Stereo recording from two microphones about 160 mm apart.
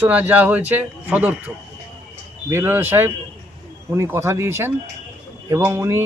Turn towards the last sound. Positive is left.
turn(degrees=-15)  # may be behind; listen again after turning